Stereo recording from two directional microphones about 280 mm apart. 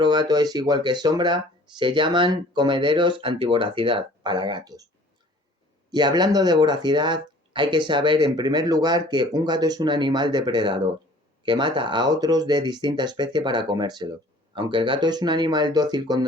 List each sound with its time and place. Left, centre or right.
0.0 s speech: centre
5.9 s speech: centre